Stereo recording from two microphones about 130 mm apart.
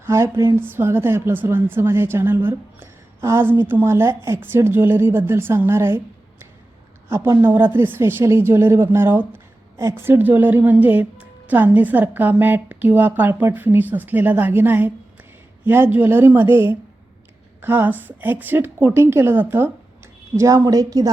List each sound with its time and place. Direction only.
0.0 s speech: 20° right (ahead or behind)
7.1 s speech: 20° right (ahead or behind)